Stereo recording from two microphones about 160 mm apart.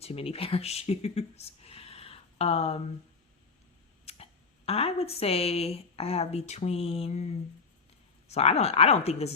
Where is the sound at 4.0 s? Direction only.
40° left (ahead or behind).